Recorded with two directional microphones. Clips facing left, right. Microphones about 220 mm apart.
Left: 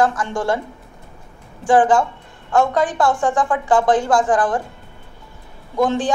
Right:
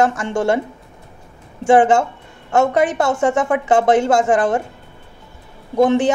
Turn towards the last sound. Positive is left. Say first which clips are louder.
# right 5 dB
turn(degrees=-20)  # may be behind; listen again after turning